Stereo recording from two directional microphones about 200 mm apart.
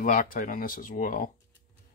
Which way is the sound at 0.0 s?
45° left (ahead or behind).